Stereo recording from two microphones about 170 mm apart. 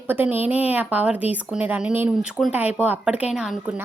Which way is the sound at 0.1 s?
10° right (ahead or behind).